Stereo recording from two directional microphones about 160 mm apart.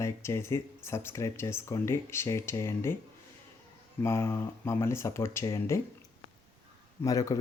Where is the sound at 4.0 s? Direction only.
15° left (ahead or behind).